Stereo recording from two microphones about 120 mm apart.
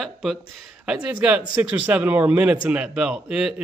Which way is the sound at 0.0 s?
Centre (ahead or behind).